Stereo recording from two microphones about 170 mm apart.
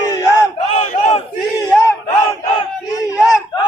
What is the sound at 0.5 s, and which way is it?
Battle cry, 40° left (ahead or behind).